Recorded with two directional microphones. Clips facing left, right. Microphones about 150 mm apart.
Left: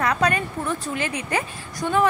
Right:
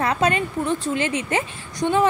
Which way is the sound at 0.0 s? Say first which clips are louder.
Right 1 dB; 25° right (ahead or behind).